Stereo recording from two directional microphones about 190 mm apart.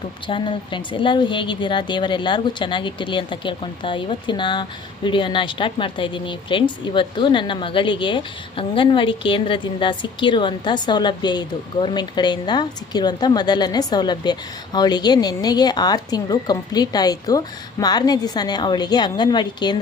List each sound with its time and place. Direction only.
0.3 s speech: 25° left (ahead or behind)